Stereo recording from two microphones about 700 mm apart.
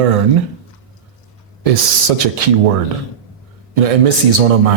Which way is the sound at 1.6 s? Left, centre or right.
Right.